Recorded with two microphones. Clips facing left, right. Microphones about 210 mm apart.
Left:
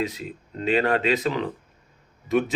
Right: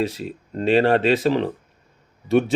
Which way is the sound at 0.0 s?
30° right (ahead or behind).